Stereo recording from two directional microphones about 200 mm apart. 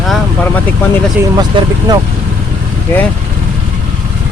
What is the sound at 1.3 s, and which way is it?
Speech, 20° right (ahead or behind).